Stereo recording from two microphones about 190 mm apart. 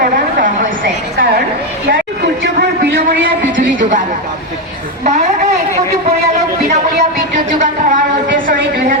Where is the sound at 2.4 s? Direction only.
60° right (ahead or behind).